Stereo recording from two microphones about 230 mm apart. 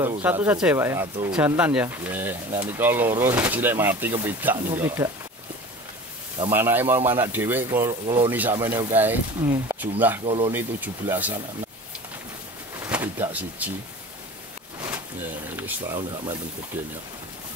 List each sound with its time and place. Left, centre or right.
0.2 s speech: centre
6.5 s speech: centre
10.2 s speech: right
10.5 s speech: centre
12.8 s speech: centre
15.5 s speech: centre